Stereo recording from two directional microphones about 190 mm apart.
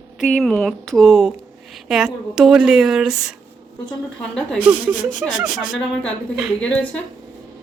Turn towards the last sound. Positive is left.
turn(degrees=-5)  # may be behind; listen again after turning